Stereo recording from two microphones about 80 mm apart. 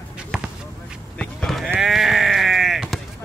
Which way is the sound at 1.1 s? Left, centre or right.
Centre.